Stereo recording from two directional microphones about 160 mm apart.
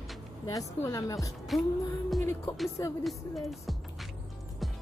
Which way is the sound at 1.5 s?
Centre (ahead or behind).